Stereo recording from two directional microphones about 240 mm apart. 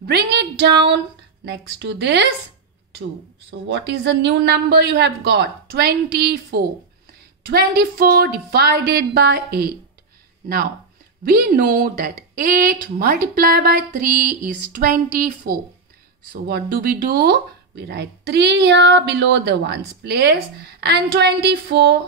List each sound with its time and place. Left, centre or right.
0.0 s speech: right
3.4 s a woman's voice: right
11.2 s a woman's voice: right